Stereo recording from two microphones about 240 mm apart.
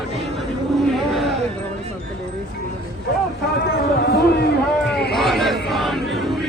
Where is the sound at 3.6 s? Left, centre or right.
Left.